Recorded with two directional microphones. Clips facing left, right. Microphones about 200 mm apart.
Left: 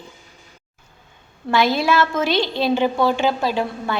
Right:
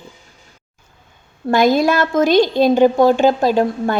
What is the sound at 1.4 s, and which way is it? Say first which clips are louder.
A woman's voice: right 5 dB; 45° right (ahead or behind).